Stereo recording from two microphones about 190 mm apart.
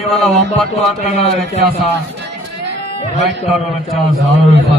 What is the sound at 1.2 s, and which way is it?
Speech, 35° left (ahead or behind).